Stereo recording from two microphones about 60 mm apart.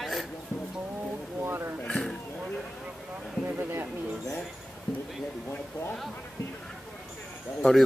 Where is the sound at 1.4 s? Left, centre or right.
Right.